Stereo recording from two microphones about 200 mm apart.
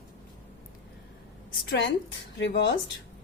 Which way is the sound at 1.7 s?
60° left (ahead or behind).